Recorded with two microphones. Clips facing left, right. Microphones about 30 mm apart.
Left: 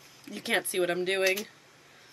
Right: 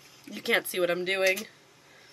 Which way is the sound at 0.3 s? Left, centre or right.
Centre.